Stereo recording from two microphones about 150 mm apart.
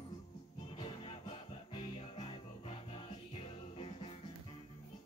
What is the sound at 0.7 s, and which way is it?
Music, 35° left (ahead or behind).